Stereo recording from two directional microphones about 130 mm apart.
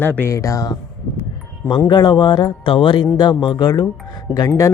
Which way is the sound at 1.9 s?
35° left (ahead or behind).